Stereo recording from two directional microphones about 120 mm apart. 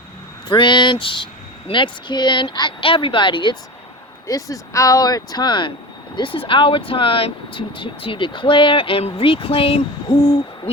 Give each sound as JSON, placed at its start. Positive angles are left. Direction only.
{"t": 0.4, "sound": "speech", "side_deg": 45}
{"t": 4.3, "sound": "speech", "side_deg": 30}